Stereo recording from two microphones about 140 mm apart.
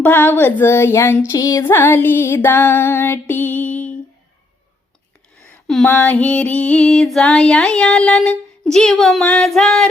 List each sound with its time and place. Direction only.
0.0 s music: 15° left (ahead or behind)
5.8 s music: 15° left (ahead or behind)